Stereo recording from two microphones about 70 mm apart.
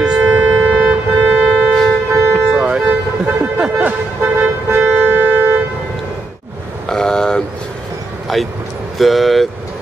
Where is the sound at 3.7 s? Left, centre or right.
Right.